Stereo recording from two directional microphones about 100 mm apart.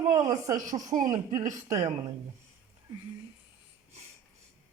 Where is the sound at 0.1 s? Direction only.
35° right (ahead or behind).